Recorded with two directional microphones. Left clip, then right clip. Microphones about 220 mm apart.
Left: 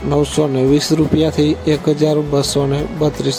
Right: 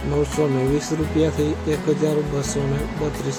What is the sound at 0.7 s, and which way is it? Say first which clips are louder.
Speech: left 7 dB; 35° left (ahead or behind).